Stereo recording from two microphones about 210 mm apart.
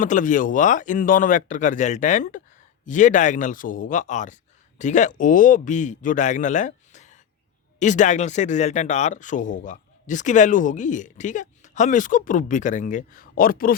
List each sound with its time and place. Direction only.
0.0 s speech: 40° left (ahead or behind)